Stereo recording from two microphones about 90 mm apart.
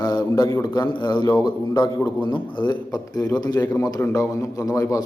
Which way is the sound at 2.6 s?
50° left (ahead or behind).